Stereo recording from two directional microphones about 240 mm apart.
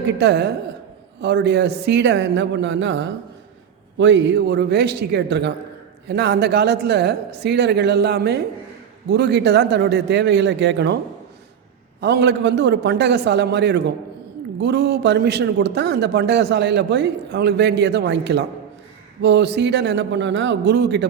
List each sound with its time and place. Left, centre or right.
0.2 s a man's voice: right
11.9 s a man's voice: right